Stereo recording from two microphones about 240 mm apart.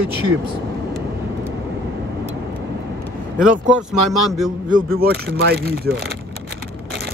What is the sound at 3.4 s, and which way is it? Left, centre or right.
Speech, centre.